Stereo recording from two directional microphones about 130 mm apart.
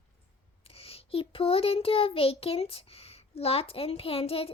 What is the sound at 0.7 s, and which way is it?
Child singing, 45° left (ahead or behind).